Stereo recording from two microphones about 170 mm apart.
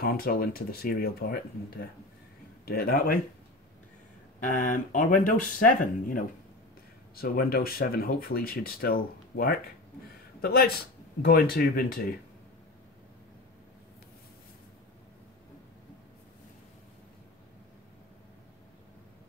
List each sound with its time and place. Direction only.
0.0 s speech: 60° left (ahead or behind)
4.5 s speech: 50° left (ahead or behind)